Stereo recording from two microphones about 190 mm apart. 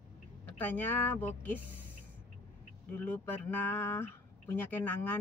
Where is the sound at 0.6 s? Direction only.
10° left (ahead or behind).